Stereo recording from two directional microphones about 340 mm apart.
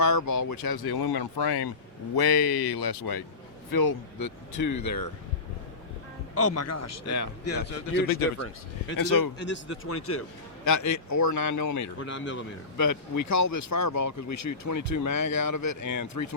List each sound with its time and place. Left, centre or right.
0.0 s speech: left
0.5 s speech: left
3.7 s speech: left
6.4 s speech: left
9.0 s a man's voice: left
9.4 s speech: left
10.6 s speech: left
12.0 s speech: left
12.7 s speech: left